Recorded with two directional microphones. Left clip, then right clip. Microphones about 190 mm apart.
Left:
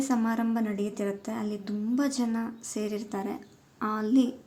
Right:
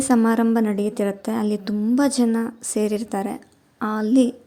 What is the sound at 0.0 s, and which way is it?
A woman's voice, 40° right (ahead or behind).